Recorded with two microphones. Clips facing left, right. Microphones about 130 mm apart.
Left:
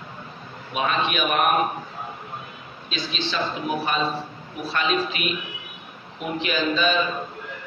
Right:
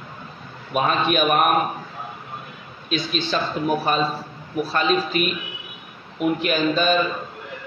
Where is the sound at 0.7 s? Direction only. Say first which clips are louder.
Right 4 dB; 45° right (ahead or behind).